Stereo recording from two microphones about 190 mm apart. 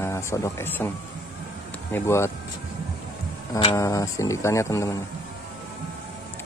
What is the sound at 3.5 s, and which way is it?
Speech, 15° left (ahead or behind).